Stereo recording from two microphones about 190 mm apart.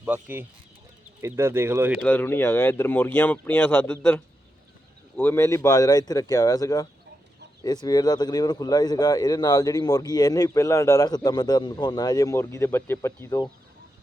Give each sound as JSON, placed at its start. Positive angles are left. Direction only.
{"t": 0.0, "sound": "speech", "side_deg": -10}
{"t": 2.0, "sound": "speech", "side_deg": 10}